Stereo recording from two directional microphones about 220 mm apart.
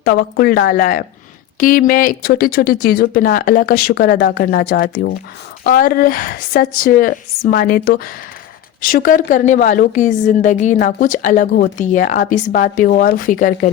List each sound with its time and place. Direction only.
0.0 s a woman's voice: 45° left (ahead or behind)